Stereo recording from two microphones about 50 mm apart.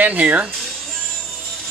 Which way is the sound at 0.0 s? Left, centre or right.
Right.